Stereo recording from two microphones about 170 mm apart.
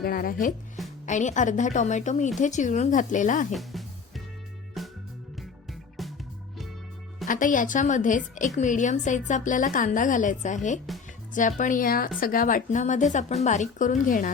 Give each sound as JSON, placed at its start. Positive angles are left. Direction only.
{"t": 0.0, "sound": "a woman's voice", "side_deg": 60}
{"t": 3.5, "sound": "music", "side_deg": 0}
{"t": 6.0, "sound": "music", "side_deg": 0}
{"t": 7.3, "sound": "a woman's voice", "side_deg": 50}